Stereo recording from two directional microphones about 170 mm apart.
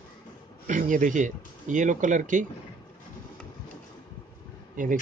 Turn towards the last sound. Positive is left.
turn(degrees=-50)  # may be behind; listen again after turning